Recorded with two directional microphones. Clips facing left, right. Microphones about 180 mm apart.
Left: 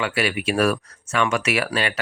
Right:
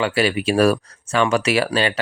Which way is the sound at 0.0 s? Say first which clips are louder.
Right 4 dB; 30° right (ahead or behind).